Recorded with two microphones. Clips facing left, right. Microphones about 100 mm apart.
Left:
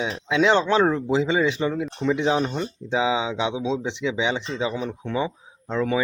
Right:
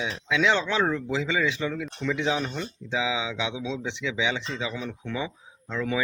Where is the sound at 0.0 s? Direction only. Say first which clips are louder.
Left 4 dB; 45° left (ahead or behind); by 2.6 s 25° left (ahead or behind).